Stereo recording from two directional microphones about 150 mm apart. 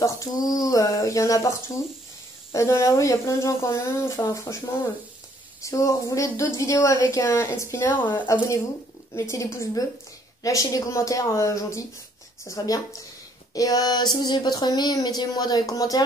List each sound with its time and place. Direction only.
0.0 s speech: 25° left (ahead or behind)
2.5 s speech: 20° left (ahead or behind)